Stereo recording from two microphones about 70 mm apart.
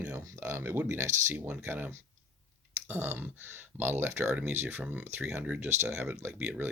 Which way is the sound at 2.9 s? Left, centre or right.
Right.